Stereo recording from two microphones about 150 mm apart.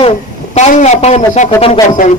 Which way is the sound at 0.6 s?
50° left (ahead or behind).